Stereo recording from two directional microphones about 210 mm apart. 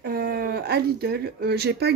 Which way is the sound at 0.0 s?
45° right (ahead or behind).